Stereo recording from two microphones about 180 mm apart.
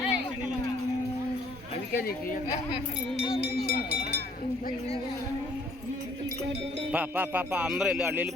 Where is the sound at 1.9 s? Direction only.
55° left (ahead or behind).